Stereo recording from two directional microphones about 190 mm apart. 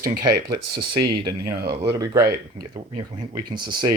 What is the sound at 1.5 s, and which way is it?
Speech, 55° right (ahead or behind).